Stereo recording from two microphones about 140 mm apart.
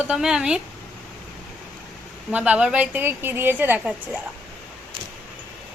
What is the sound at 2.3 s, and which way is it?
A woman's voice, 10° right (ahead or behind).